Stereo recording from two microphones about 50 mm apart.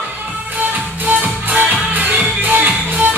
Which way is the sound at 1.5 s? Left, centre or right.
Right.